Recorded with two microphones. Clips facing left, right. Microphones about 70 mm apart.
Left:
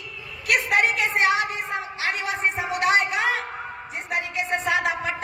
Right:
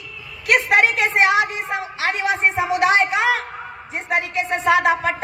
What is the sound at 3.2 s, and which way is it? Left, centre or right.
Speech, right.